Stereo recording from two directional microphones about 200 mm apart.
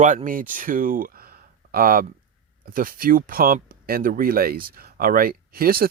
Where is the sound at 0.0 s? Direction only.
40° right (ahead or behind).